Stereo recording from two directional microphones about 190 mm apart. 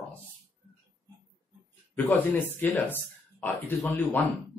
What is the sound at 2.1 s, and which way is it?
Speech, 10° left (ahead or behind).